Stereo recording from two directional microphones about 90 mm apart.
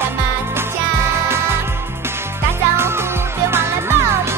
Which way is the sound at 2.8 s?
30° right (ahead or behind).